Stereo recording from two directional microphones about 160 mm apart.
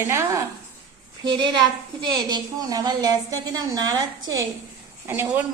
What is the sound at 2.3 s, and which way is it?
A woman's voice, 25° right (ahead or behind).